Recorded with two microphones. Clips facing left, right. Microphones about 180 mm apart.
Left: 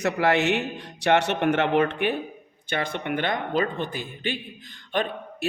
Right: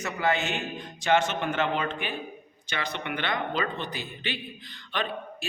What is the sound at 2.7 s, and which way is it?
A man's voice, 50° left (ahead or behind).